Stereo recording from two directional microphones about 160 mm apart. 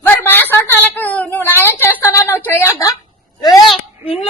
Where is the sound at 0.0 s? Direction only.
10° left (ahead or behind).